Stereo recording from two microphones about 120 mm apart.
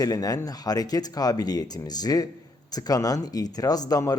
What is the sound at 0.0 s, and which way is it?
Speech, 30° left (ahead or behind).